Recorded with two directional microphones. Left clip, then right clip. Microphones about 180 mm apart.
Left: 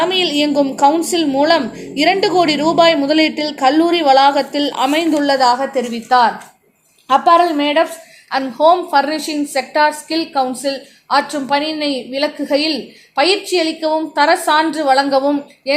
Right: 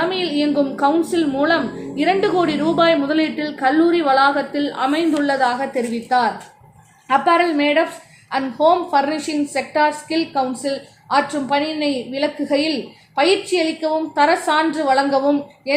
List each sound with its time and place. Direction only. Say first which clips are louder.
0.0 s a woman's voice: left 5 dB; 40° left (ahead or behind)
7.1 s a woman's voice: left 4 dB; 35° left (ahead or behind)